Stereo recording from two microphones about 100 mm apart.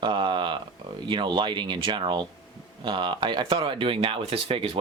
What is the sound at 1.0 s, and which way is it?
Speech, 50° right (ahead or behind).